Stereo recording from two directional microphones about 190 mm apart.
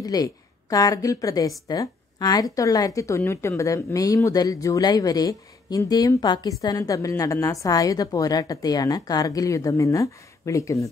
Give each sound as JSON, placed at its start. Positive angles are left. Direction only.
{"t": 0.0, "sound": "a woman's voice", "side_deg": 20}